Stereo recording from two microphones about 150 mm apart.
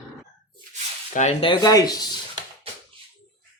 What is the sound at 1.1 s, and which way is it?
Speech, 45° left (ahead or behind).